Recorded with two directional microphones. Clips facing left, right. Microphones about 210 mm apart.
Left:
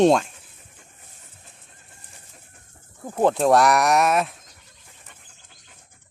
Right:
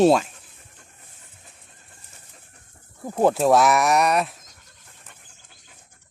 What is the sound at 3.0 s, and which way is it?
Speech, 5° right (ahead or behind).